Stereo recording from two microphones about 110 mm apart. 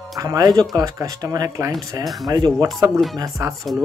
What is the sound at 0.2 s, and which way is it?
Speech, 35° right (ahead or behind).